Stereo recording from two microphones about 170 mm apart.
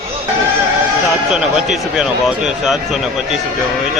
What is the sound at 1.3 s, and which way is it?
A man's voice, 5° right (ahead or behind).